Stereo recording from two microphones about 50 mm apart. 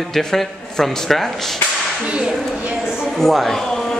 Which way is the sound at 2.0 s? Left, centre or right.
Centre.